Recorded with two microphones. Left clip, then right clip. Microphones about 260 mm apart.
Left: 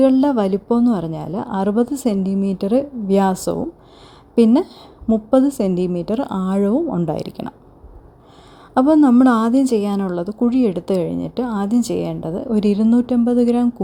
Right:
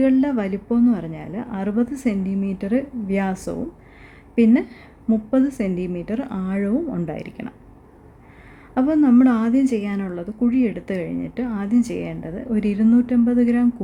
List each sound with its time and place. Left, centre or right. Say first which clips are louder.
0.0 s speech: left 5 dB; left
8.7 s speech: left 4 dB; left